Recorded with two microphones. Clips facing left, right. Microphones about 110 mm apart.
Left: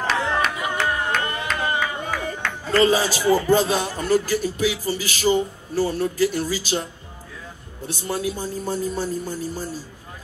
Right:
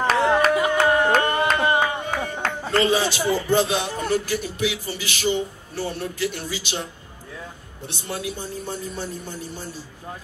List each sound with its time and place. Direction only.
0.6 s music: 60° right (ahead or behind)
1.1 s a sound: 40° right (ahead or behind)
2.8 s speech: 40° left (ahead or behind)
7.9 s speech: 40° left (ahead or behind)